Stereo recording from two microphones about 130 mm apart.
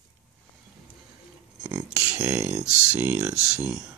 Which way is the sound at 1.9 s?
5° right (ahead or behind).